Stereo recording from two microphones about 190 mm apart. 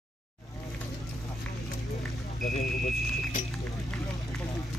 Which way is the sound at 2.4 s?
45° left (ahead or behind).